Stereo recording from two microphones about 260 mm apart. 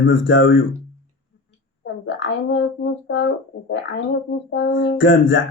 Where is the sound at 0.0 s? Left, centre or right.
Left.